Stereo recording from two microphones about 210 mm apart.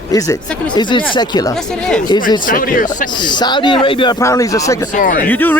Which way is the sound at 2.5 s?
40° left (ahead or behind).